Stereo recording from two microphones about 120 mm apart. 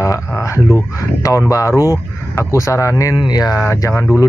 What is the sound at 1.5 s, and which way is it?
Speech, 25° left (ahead or behind).